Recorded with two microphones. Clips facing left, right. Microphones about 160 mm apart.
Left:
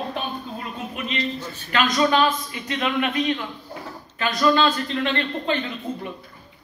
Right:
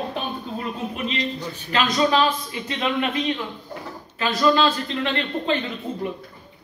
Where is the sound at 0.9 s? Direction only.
30° right (ahead or behind).